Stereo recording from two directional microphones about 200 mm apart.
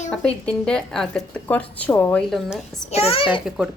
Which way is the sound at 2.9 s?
30° left (ahead or behind).